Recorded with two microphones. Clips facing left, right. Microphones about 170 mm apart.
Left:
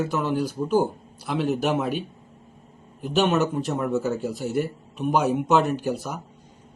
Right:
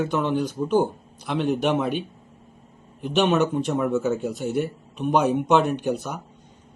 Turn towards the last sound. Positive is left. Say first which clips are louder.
# right 1 dB
turn(degrees=0)  # may be behind; listen again after turning